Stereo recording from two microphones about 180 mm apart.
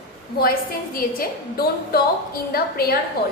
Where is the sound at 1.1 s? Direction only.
60° left (ahead or behind).